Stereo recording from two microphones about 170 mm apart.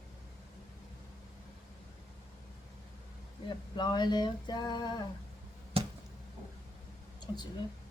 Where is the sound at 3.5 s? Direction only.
25° left (ahead or behind).